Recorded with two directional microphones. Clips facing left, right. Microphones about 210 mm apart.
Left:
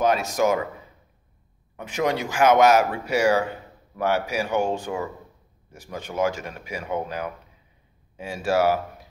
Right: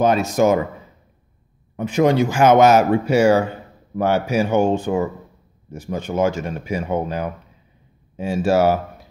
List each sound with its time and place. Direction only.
0.0 s speech: 25° right (ahead or behind)
1.8 s speech: 30° right (ahead or behind)